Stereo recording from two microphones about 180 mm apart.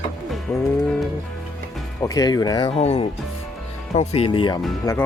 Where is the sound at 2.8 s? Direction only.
35° left (ahead or behind).